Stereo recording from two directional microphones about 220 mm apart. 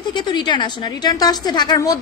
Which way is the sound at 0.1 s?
20° left (ahead or behind).